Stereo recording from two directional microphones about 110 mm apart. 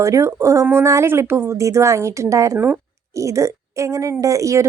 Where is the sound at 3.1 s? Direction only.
30° right (ahead or behind).